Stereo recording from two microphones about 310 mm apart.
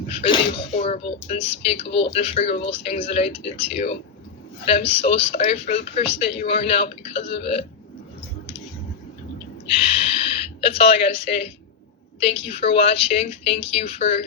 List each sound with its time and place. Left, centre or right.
0.1 s speech: centre
1.9 s speech: left
2.1 s speech: left
9.6 s speech: centre